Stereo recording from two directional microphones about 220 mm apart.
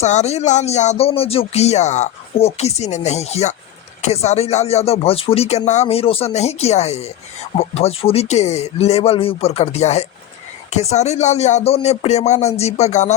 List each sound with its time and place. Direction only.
0.0 s speech: 30° left (ahead or behind)